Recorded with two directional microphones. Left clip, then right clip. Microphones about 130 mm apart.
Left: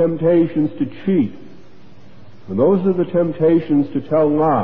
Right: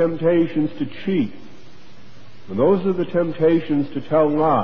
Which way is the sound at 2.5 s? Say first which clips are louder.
Left 2 dB; 15° left (ahead or behind).